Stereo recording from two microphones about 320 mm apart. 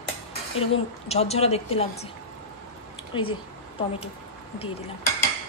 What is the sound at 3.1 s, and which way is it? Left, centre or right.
Speech, centre.